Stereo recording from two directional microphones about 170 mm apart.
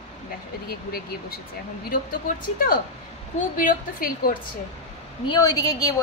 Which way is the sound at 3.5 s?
55° left (ahead or behind).